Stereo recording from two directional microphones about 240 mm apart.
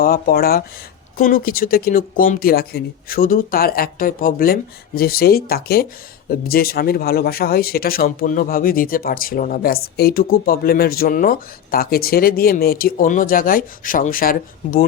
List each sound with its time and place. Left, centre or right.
0.0 s speech: left